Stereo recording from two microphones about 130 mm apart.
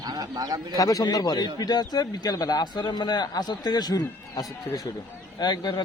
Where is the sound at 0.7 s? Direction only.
25° left (ahead or behind).